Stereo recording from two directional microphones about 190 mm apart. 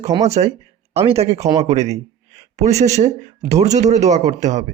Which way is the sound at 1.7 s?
35° right (ahead or behind).